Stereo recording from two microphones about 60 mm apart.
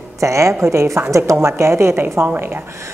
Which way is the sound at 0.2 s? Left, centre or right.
Right.